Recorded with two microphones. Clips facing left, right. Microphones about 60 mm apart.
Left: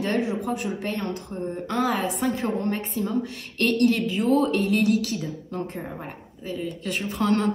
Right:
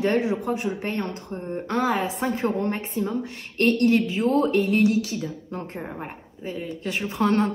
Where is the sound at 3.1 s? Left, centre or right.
Right.